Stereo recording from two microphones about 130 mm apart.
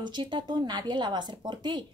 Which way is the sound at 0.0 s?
35° right (ahead or behind).